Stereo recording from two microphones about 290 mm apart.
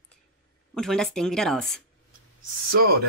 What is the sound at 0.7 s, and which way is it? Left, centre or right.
Speech, centre.